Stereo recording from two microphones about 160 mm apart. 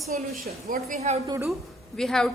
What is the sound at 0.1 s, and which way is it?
Speech, 55° right (ahead or behind).